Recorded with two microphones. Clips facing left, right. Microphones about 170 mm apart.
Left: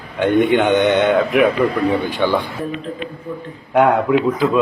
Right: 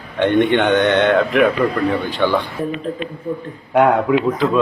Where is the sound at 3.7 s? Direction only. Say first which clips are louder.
Even; centre (ahead or behind).